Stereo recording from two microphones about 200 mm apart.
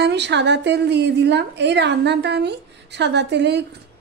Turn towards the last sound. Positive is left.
turn(degrees=-60)  # may be behind; listen again after turning